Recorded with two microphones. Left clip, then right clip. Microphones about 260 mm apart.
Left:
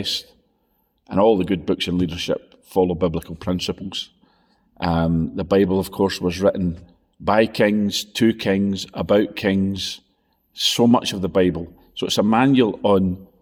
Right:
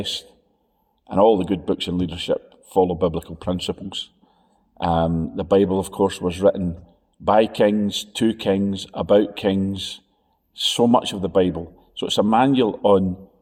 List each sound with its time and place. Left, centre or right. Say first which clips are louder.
0.0 s a man's voice: left 2 dB; left